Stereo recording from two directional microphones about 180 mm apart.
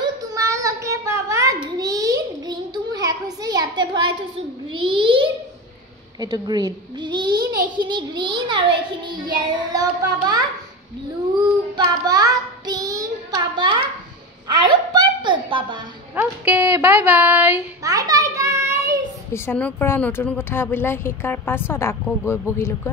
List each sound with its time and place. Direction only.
0.0 s a sound: 15° right (ahead or behind)
4.7 s a child's voice: 30° right (ahead or behind)
9.1 s child singing: 25° right (ahead or behind)
11.4 s child singing: 20° right (ahead or behind)
14.7 s a sound: 25° right (ahead or behind)
16.2 s speech: 10° right (ahead or behind)
17.8 s children playing: 20° right (ahead or behind)
19.3 s a woman's voice: 10° left (ahead or behind)